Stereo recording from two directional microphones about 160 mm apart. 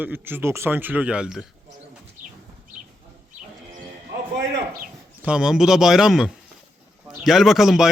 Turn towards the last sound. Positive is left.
turn(degrees=0)  # may be behind; listen again after turning